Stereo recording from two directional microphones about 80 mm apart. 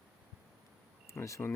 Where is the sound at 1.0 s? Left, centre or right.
Left.